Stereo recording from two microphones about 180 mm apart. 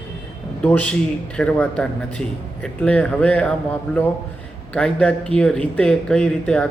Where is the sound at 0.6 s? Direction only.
5° left (ahead or behind).